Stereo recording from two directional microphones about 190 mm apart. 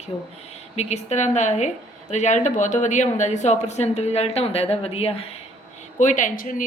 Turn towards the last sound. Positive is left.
turn(degrees=45)  # may be behind; listen again after turning